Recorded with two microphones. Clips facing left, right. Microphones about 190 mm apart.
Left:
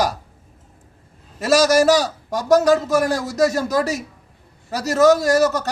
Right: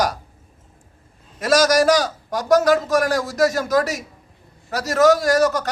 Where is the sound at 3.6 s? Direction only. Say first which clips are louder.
Right 1 dB; 30° left (ahead or behind).